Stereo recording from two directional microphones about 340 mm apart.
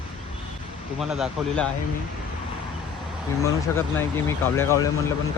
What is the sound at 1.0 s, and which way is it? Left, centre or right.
Speech, centre.